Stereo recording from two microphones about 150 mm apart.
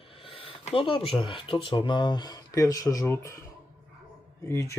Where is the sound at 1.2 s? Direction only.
35° left (ahead or behind); by 3.4 s 15° left (ahead or behind).